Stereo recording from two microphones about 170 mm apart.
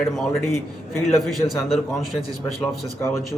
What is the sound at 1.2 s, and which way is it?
Speech, centre (ahead or behind).